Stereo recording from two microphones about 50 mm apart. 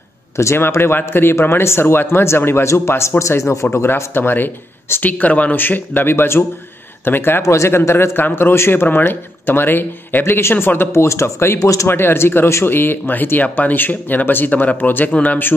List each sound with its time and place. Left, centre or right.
0.6 s speech: left
3.7 s speech: left
5.2 s speech: left
5.6 s speech: left
7.4 s speech: left
7.7 s speech: left
8.8 s speech: left
10.9 s speech: left
11.9 s speech: left
12.6 s speech: left